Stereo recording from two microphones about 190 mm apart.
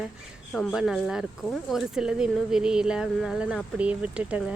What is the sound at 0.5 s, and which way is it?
Speech, centre (ahead or behind).